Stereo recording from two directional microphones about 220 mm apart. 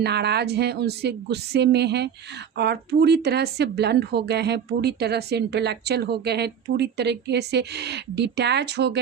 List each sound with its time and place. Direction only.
0.0 s a woman's voice: 50° right (ahead or behind)